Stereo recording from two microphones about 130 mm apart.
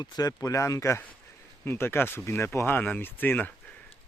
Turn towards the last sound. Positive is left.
turn(degrees=15)  # may be behind; listen again after turning